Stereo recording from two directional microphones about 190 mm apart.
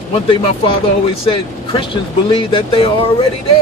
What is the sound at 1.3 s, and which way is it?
Speech, 25° left (ahead or behind).